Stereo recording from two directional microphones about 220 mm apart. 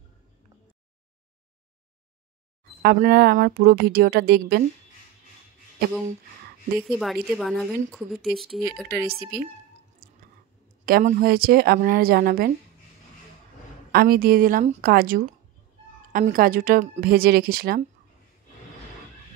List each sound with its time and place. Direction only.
2.8 s speech: 45° right (ahead or behind)
6.8 s a woman's voice: centre (ahead or behind)
8.8 s speech: 45° right (ahead or behind)
10.9 s speech: 40° right (ahead or behind)
13.9 s a woman's voice: 40° right (ahead or behind)